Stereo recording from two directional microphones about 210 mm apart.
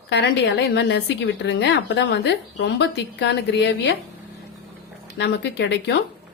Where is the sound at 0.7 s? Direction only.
55° left (ahead or behind).